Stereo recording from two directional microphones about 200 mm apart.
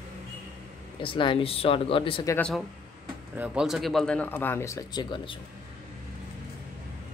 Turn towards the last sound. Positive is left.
turn(degrees=25)  # may be behind; listen again after turning